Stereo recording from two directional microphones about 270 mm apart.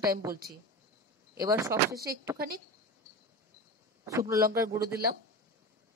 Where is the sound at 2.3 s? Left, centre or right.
Right.